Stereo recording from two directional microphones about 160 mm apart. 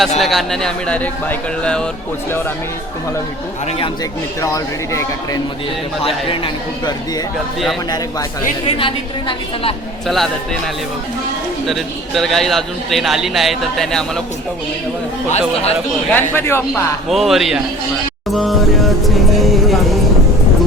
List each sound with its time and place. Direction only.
0.2 s a man's voice: centre (ahead or behind)
4.4 s speech: 20° left (ahead or behind)
6.2 s a woman's voice: 35° left (ahead or behind)
8.6 s a woman's voice: 35° left (ahead or behind)
10.1 s a man's voice: centre (ahead or behind)
11.6 s a man's voice: centre (ahead or behind)
15.3 s speech: 40° left (ahead or behind)
16.1 s speech: 15° left (ahead or behind)
17.1 s a man's voice: centre (ahead or behind)
18.3 s music: centre (ahead or behind)